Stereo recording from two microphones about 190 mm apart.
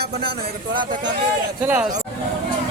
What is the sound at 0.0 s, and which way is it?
Speech, 55° right (ahead or behind).